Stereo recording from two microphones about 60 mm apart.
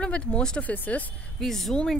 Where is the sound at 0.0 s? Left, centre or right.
Centre.